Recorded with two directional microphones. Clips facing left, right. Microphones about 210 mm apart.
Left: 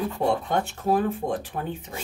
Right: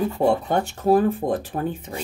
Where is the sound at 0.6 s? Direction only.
40° right (ahead or behind).